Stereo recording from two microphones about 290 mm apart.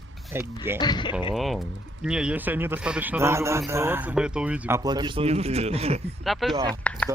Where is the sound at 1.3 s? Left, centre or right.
Centre; by 6.0 s right.